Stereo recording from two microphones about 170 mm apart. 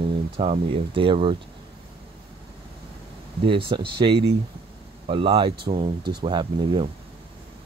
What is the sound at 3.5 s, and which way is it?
Speech, 30° right (ahead or behind).